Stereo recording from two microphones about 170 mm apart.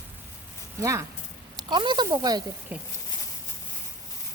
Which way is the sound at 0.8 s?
15° right (ahead or behind).